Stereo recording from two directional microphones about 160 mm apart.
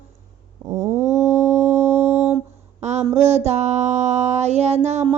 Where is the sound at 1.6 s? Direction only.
15° right (ahead or behind).